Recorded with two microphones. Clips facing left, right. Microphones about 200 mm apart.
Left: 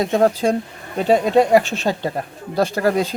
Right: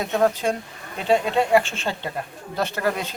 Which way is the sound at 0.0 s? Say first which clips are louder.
Left 5 dB; 35° left (ahead or behind).